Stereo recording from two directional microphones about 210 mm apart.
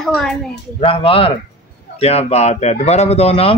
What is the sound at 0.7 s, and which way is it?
Speech, 25° left (ahead or behind).